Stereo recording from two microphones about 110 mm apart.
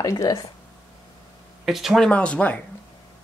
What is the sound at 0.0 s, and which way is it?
Speech, 30° left (ahead or behind).